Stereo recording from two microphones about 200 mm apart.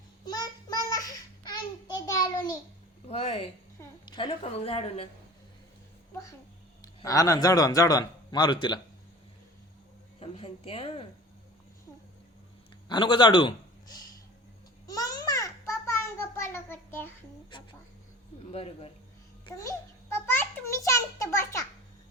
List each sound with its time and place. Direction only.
0.3 s child singing: 20° left (ahead or behind)
1.9 s a sound: 20° left (ahead or behind)
3.1 s a woman's voice: 30° left (ahead or behind)
6.8 s a man's voice: 15° left (ahead or behind)
10.2 s a woman's voice: 30° left (ahead or behind)
12.9 s a woman's voice: 25° left (ahead or behind)
14.8 s a sound: 20° left (ahead or behind)
18.5 s speech: 30° left (ahead or behind)
19.5 s a sound: 15° left (ahead or behind)